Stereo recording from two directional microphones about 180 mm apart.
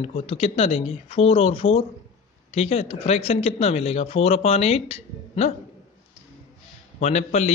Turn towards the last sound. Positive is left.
turn(degrees=40)  # may be behind; listen again after turning